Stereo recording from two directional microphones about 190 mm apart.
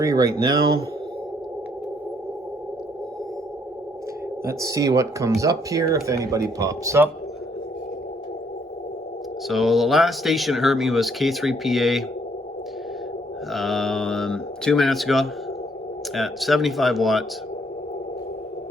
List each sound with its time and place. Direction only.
0.0 s speech: 15° right (ahead or behind)
4.4 s speech: 15° right (ahead or behind)
9.5 s speech: centre (ahead or behind)
13.5 s speech: centre (ahead or behind)